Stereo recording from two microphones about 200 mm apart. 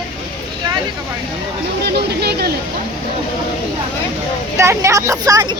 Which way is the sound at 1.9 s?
55° right (ahead or behind).